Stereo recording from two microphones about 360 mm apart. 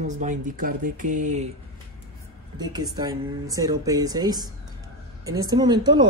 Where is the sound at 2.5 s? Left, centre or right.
Centre.